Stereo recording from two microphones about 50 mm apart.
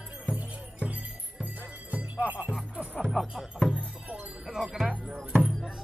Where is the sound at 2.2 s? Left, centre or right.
Right.